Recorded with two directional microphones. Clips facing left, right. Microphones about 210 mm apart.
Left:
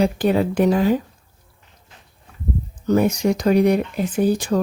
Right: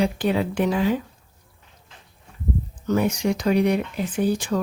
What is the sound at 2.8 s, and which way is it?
Speech, 40° left (ahead or behind).